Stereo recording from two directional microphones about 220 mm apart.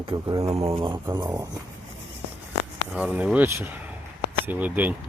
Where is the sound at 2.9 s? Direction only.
5° right (ahead or behind).